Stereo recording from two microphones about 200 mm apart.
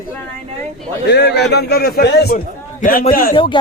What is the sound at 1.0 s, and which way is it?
A man's voice, 55° left (ahead or behind).